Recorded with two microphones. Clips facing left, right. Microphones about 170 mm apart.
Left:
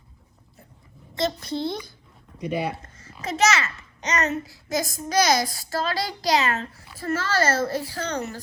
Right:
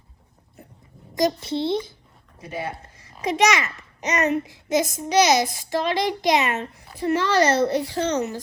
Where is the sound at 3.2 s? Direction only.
15° right (ahead or behind).